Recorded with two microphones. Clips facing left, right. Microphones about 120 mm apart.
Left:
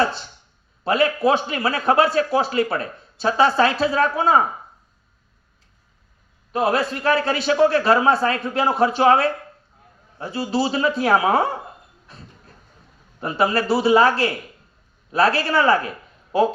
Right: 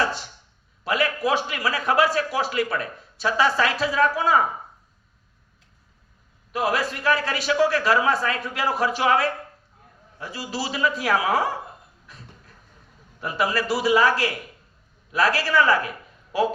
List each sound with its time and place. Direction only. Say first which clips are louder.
0.0 s a man's voice: left 4 dB; 30° left (ahead or behind)
6.5 s a man's voice: left 4 dB; 30° left (ahead or behind)
12.0 s a sound: left 4 dB; 30° left (ahead or behind)
13.1 s a man's voice: left 4 dB; 30° left (ahead or behind)